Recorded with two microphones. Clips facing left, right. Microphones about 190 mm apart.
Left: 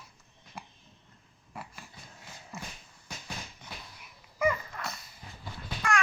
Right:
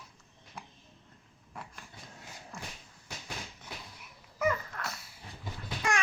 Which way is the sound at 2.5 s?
5° left (ahead or behind).